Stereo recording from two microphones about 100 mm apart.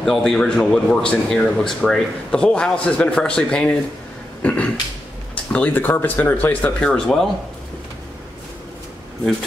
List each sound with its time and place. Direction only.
0.0 s a man's voice: 5° left (ahead or behind)
4.4 s a sound: 15° left (ahead or behind)
5.3 s a man's voice: 15° left (ahead or behind)